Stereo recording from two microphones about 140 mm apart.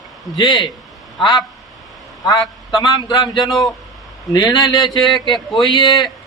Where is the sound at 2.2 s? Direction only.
30° left (ahead or behind).